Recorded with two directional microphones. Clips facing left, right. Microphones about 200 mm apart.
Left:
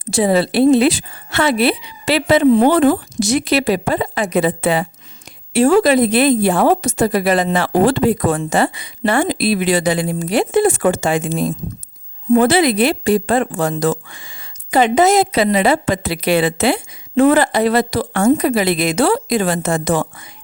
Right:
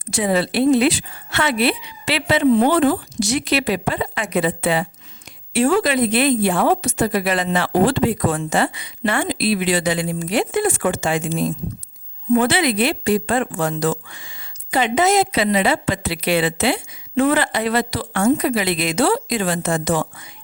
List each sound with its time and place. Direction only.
0.1 s a woman's voice: 35° left (ahead or behind); by 20.2 s 50° left (ahead or behind)